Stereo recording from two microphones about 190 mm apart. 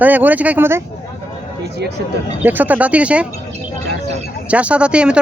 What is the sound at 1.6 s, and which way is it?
Speech, 60° right (ahead or behind).